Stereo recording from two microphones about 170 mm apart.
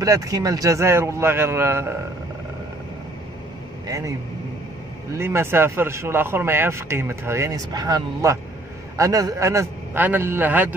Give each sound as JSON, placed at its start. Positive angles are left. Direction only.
{"t": 0.0, "sound": "speech", "side_deg": -20}
{"t": 3.8, "sound": "a man's voice", "side_deg": -20}
{"t": 5.1, "sound": "speech", "side_deg": -15}